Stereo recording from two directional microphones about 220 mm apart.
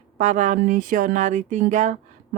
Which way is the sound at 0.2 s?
35° right (ahead or behind).